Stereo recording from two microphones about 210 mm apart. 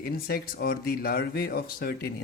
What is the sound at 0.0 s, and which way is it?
Speech, 45° left (ahead or behind).